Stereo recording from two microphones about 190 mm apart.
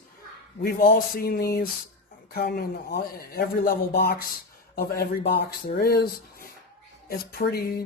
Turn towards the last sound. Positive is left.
turn(degrees=50)  # may be behind; listen again after turning